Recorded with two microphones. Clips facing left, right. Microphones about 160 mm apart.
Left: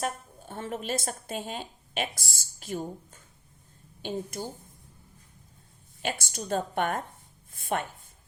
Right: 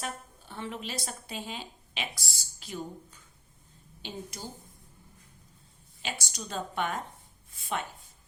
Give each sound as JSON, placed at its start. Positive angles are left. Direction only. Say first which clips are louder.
{"t": 0.0, "sound": "a woman's voice", "louder": "left 6 dB", "side_deg": 45}
{"t": 6.0, "sound": "a woman's voice", "louder": "left 5 dB", "side_deg": 50}